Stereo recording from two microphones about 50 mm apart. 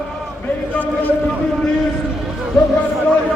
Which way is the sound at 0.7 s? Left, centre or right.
Left.